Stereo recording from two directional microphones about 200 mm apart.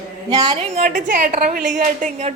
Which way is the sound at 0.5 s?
35° right (ahead or behind).